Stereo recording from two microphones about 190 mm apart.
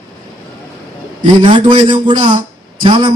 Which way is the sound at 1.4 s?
25° right (ahead or behind).